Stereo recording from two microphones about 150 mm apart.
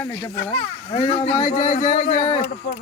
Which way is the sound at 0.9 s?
45° left (ahead or behind).